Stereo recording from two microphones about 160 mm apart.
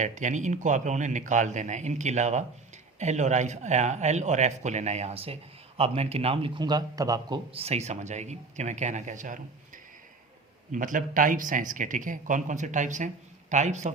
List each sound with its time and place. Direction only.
0.0 s a man's voice: 50° right (ahead or behind)